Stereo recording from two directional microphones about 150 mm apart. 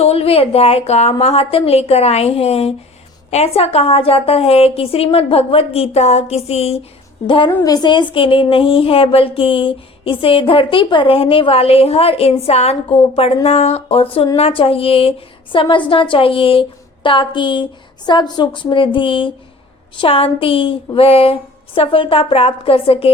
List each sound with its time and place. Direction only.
0.0 s a woman's voice: 40° left (ahead or behind)